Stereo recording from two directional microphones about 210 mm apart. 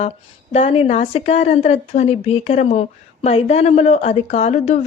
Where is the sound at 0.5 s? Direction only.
25° left (ahead or behind).